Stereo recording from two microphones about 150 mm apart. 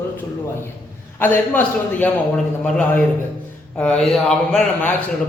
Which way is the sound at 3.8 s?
5° left (ahead or behind).